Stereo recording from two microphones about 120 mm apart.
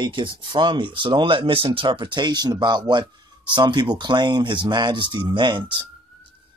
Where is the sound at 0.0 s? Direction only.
40° right (ahead or behind).